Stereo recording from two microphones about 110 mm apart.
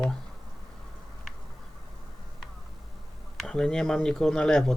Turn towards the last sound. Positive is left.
turn(degrees=5)  # may be behind; listen again after turning